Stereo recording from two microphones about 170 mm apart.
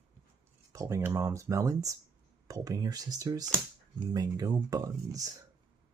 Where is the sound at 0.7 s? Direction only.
20° right (ahead or behind).